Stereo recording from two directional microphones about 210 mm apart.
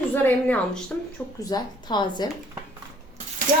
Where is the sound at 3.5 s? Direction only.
40° right (ahead or behind).